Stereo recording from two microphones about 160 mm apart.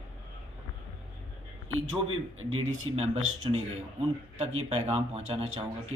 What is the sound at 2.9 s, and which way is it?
Speech, 30° right (ahead or behind).